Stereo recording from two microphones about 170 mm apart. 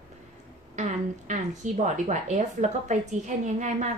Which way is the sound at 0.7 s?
45° right (ahead or behind).